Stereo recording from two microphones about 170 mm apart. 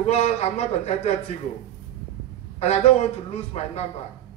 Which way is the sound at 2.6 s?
40° left (ahead or behind).